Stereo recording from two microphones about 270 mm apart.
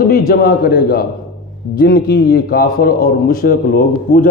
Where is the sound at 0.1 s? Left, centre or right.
Left.